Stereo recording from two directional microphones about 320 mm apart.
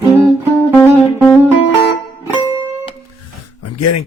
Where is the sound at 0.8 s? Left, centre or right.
Centre.